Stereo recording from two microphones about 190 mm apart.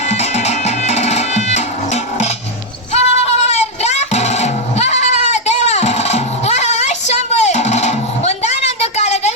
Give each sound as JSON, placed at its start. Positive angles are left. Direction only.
{"t": 0.1, "sound": "music", "side_deg": 35}